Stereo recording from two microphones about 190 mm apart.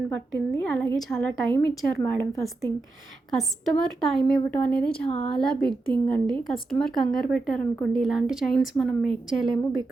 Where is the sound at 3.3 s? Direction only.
Centre (ahead or behind).